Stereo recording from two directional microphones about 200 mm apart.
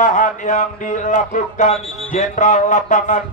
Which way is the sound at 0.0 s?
40° left (ahead or behind).